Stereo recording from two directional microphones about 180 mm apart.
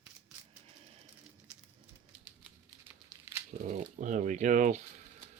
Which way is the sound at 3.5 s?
45° right (ahead or behind).